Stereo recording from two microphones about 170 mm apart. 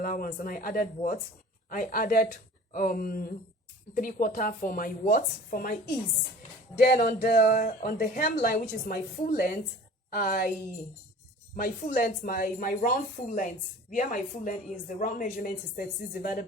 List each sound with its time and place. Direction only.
0.0 s speech: 55° left (ahead or behind)
6.7 s a woman's voice: 60° left (ahead or behind)
11.5 s a woman's voice: 55° left (ahead or behind)